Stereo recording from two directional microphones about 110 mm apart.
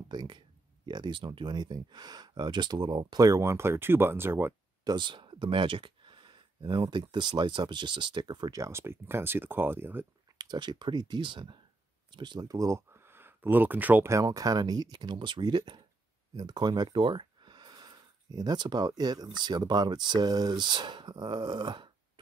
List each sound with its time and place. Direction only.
0.1 s speech: 40° right (ahead or behind); by 4.6 s 20° right (ahead or behind)
4.8 s speech: 45° right (ahead or behind); by 10.0 s 20° right (ahead or behind)
10.3 s speech: 40° right (ahead or behind); by 14.1 s 15° right (ahead or behind)
14.1 s speech: 30° right (ahead or behind)